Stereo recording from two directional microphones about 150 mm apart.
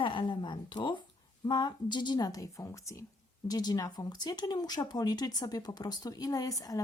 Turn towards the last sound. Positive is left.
turn(degrees=25)  # may be behind; listen again after turning